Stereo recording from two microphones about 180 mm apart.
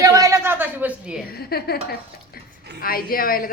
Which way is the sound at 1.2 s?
60° left (ahead or behind).